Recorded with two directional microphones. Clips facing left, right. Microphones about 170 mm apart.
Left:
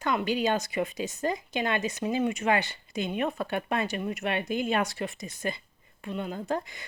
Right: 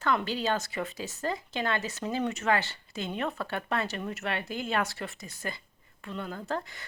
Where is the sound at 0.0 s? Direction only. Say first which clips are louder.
Left 2 dB; 15° left (ahead or behind).